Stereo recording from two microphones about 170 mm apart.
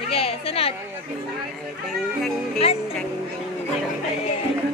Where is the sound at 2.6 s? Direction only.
35° left (ahead or behind).